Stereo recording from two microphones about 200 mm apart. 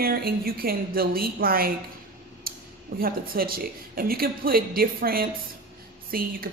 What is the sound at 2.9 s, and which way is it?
A woman's voice, 45° right (ahead or behind).